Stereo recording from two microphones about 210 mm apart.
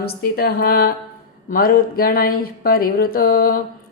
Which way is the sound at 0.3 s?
45° left (ahead or behind).